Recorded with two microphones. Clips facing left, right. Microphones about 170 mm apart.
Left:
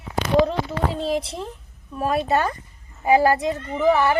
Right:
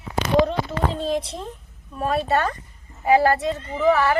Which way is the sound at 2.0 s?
10° left (ahead or behind).